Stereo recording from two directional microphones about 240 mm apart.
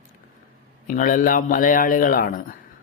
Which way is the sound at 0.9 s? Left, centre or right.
Left.